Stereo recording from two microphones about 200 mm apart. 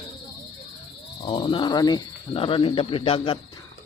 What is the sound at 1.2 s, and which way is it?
Speech, 25° left (ahead or behind).